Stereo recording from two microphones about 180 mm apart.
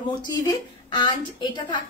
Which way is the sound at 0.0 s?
25° left (ahead or behind).